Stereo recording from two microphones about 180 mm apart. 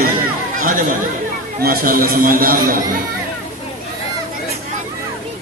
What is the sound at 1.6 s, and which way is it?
Speech, 55° right (ahead or behind).